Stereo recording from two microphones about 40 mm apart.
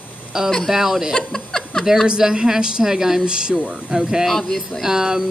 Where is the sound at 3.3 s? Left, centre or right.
Right.